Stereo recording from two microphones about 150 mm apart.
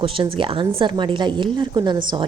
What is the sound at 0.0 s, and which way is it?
Speech, 35° right (ahead or behind).